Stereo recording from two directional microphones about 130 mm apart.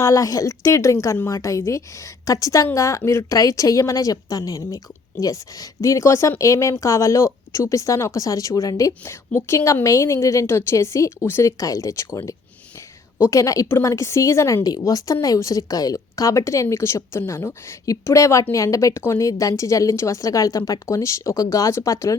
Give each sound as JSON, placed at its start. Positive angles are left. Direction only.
{"t": 0.0, "sound": "a woman's voice", "side_deg": 25}